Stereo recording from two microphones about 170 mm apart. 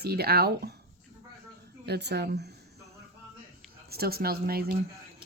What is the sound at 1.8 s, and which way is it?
Speech, 75° right (ahead or behind).